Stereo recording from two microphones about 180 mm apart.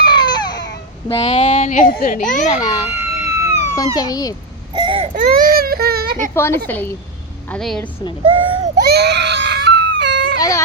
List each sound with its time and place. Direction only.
0.0 s baby cry: 25° left (ahead or behind)
1.0 s a child's voice: 30° left (ahead or behind)
2.8 s a sound: 35° left (ahead or behind)
3.9 s a child's voice: 20° left (ahead or behind)
4.7 s baby cry: 25° right (ahead or behind)
5.1 s speech: 50° right (ahead or behind)
6.3 s a woman's voice: 15° left (ahead or behind)
8.3 s baby cry: 25° right (ahead or behind)
8.8 s baby cry: 65° right (ahead or behind); by 10.3 s 85° right
10.3 s baby cry: 20° left (ahead or behind)